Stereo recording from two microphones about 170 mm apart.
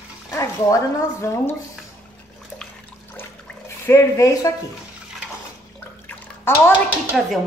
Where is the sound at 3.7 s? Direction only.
15° left (ahead or behind).